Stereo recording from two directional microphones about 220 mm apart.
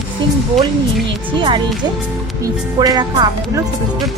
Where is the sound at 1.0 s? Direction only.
20° right (ahead or behind).